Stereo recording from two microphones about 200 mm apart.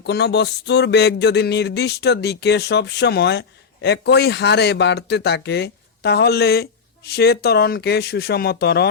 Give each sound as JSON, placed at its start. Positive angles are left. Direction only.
{"t": 0.0, "sound": "speech", "side_deg": 55}